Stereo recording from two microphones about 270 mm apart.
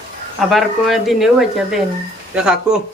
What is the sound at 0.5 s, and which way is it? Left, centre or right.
Speech, centre.